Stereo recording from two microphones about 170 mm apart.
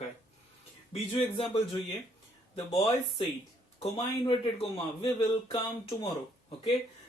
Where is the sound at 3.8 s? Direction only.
30° left (ahead or behind).